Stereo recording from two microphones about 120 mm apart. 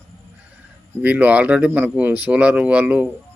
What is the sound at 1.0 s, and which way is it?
Speech, 10° right (ahead or behind).